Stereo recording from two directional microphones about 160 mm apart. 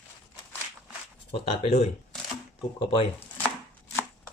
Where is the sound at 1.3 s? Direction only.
40° left (ahead or behind).